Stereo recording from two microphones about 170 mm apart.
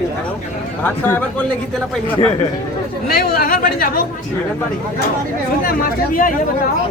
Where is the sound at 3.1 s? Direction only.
60° left (ahead or behind).